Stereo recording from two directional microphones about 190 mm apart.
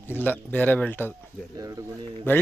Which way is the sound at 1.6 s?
20° right (ahead or behind).